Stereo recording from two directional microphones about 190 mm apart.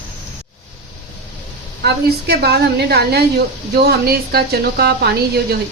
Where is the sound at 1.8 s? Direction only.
60° right (ahead or behind).